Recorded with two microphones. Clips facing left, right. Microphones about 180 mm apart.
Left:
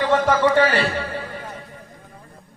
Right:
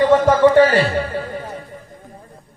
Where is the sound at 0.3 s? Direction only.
40° right (ahead or behind).